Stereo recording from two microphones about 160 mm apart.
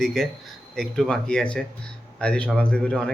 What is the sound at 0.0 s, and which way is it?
Speech, centre (ahead or behind).